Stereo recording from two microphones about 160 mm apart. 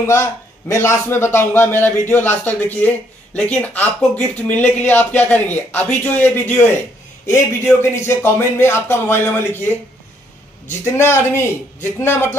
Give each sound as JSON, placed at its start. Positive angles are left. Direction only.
{"t": 0.0, "sound": "speech", "side_deg": 15}
{"t": 11.0, "sound": "speech", "side_deg": 15}